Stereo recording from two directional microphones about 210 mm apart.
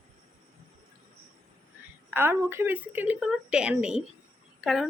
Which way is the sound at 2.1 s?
10° right (ahead or behind).